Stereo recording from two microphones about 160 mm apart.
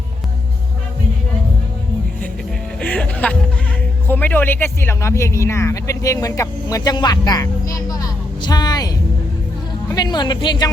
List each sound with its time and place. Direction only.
2.8 s music: 10° left (ahead or behind)
4.1 s speech: 10° left (ahead or behind)
9.9 s speech: 25° left (ahead or behind)